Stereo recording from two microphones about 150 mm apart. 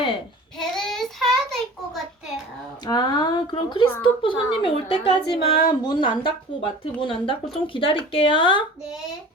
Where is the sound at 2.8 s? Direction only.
30° left (ahead or behind).